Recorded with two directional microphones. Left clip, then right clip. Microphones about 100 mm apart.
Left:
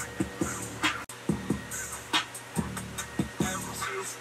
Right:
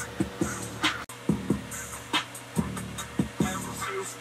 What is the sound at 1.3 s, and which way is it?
Music, 25° left (ahead or behind).